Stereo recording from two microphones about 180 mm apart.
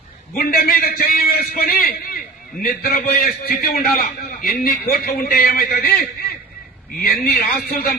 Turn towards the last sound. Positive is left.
turn(degrees=55)  # may be behind; listen again after turning